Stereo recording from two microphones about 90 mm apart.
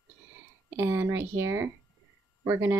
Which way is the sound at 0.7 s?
25° right (ahead or behind).